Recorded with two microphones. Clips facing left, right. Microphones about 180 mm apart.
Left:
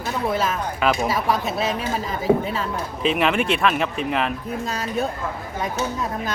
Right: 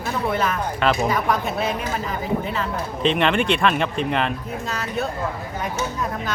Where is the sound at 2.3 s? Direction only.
90° left.